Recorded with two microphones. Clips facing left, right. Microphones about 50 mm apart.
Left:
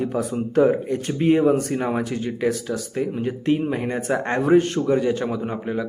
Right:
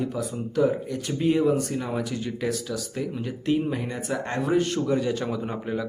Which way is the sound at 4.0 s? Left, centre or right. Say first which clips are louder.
Left 6 dB; left.